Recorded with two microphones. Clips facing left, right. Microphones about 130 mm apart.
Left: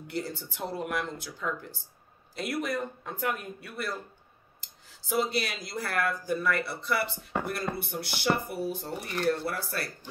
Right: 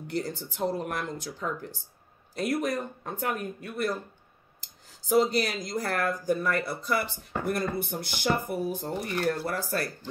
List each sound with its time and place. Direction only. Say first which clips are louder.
0.1 s speech: right 3 dB; 45° right (ahead or behind)